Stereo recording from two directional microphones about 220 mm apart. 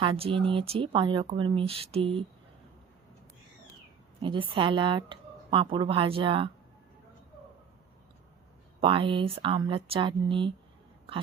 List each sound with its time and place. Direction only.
0.0 s a woman's voice: 25° right (ahead or behind)
4.2 s a woman's voice: 20° right (ahead or behind)
8.8 s a woman's voice: 25° right (ahead or behind)